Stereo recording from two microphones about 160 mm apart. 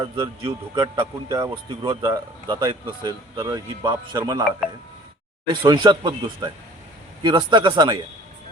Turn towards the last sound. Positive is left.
turn(degrees=-30)  # may be behind; listen again after turning